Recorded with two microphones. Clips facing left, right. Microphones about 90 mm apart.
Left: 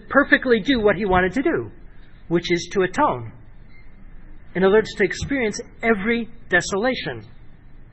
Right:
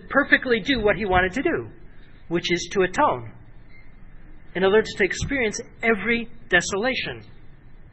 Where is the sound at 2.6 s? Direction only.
Centre (ahead or behind).